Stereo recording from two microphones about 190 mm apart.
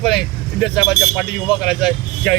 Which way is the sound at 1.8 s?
Centre (ahead or behind).